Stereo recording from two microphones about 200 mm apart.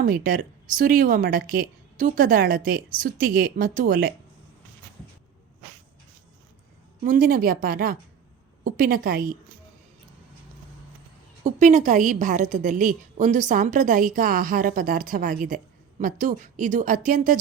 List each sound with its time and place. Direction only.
0.0 s a woman's voice: 45° right (ahead or behind)
7.0 s a woman's voice: 45° right (ahead or behind)
11.4 s a woman's voice: 40° right (ahead or behind)